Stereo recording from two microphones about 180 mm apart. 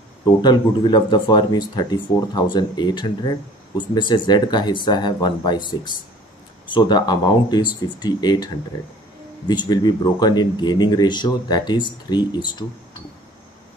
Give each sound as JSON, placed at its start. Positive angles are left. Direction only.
{"t": 0.2, "sound": "speech", "side_deg": 25}
{"t": 9.5, "sound": "speech", "side_deg": 25}